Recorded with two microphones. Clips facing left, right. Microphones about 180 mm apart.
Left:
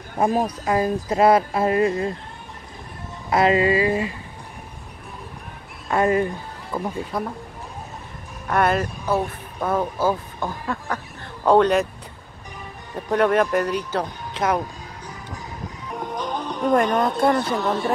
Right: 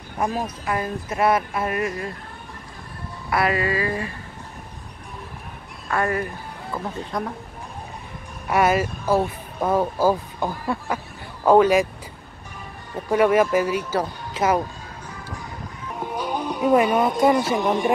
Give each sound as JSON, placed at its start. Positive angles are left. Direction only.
{"t": 0.2, "sound": "speech", "side_deg": 30}
{"t": 3.3, "sound": "speech", "side_deg": 25}
{"t": 5.9, "sound": "speech", "side_deg": 20}
{"t": 7.1, "sound": "speech", "side_deg": 5}
{"t": 8.5, "sound": "speech", "side_deg": -5}
{"t": 12.9, "sound": "speech", "side_deg": -5}
{"t": 16.0, "sound": "speech", "side_deg": -10}